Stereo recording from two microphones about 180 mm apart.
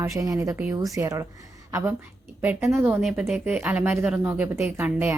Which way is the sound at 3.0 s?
Centre (ahead or behind).